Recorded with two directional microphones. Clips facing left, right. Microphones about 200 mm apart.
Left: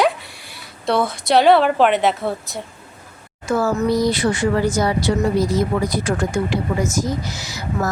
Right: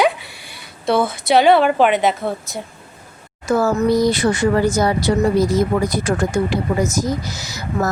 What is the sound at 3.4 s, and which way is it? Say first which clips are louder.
Speech: right 2 dB; 40° right (ahead or behind).